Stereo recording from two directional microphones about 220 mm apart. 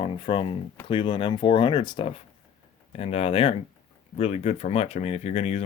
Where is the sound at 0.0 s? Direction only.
25° left (ahead or behind).